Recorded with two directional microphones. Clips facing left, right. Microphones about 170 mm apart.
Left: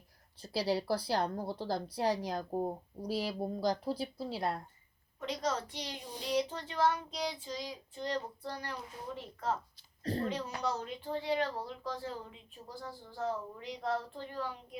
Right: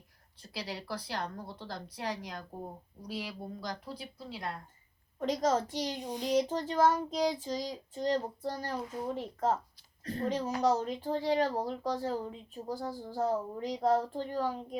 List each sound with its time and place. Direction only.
0.5 s a woman's voice: 35° left (ahead or behind)
5.2 s a child's voice: 45° right (ahead or behind)